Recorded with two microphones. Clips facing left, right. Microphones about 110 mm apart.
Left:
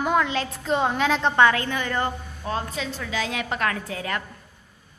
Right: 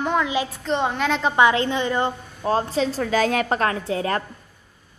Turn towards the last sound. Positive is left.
turn(degrees=-35)  # may be behind; listen again after turning